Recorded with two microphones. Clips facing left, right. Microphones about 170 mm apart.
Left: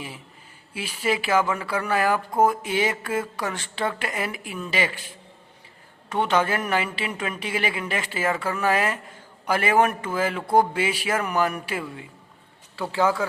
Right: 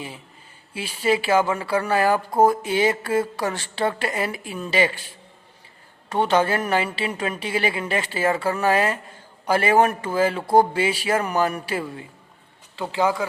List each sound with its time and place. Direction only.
0.7 s speech: 30° right (ahead or behind)
6.1 s speech: 35° right (ahead or behind)
12.7 s speech: 20° right (ahead or behind)